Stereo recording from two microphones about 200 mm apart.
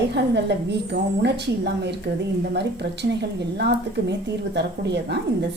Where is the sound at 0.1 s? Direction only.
55° right (ahead or behind).